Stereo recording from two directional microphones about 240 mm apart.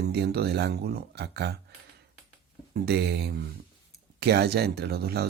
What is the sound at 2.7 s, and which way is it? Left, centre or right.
Speech, right.